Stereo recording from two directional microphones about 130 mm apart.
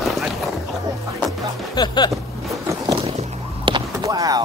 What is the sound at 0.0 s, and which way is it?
Music, centre (ahead or behind).